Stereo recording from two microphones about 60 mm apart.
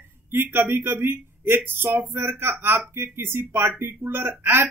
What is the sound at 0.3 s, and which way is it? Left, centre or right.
Speech, right.